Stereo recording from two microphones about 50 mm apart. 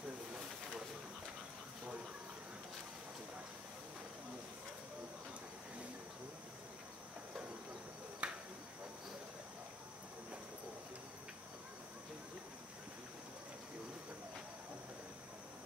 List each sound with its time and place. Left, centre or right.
8.2 s insect: right